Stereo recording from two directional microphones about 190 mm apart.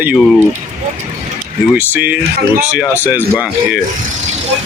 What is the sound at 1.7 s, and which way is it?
Speech, 10° right (ahead or behind).